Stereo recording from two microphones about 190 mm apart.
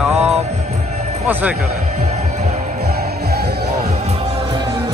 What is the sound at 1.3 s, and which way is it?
Speech, 10° right (ahead or behind).